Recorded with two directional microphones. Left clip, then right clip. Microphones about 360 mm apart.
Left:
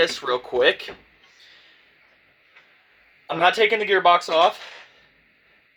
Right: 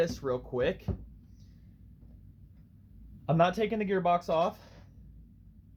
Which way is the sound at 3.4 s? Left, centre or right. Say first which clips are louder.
Left 10 dB; left.